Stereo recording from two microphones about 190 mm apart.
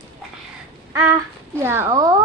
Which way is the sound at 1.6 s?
10° right (ahead or behind).